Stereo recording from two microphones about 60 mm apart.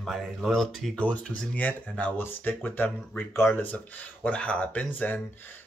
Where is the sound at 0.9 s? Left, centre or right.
Centre.